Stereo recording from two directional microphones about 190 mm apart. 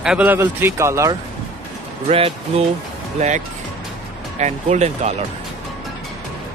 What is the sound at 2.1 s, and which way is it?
Speech, 30° right (ahead or behind).